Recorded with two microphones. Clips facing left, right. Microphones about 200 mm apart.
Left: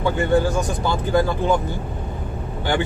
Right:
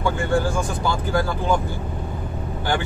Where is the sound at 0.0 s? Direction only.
20° left (ahead or behind).